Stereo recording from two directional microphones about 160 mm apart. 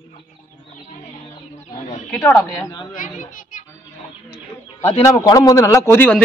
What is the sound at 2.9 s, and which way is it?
Speech, 55° left (ahead or behind).